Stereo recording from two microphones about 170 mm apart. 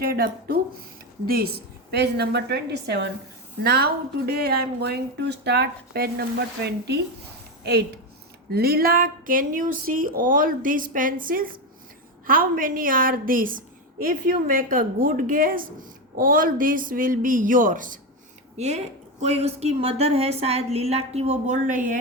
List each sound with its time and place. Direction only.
0.0 s a woman's voice: 60° right (ahead or behind); by 7.9 s 80° right
8.4 s a woman's voice: 65° right (ahead or behind)
18.5 s a woman's voice: 40° right (ahead or behind)